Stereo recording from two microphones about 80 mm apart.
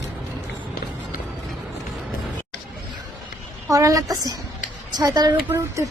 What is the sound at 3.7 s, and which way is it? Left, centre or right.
A woman's voice, right.